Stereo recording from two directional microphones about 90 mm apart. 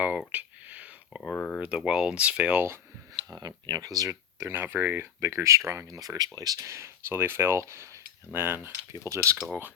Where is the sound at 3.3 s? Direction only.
45° right (ahead or behind).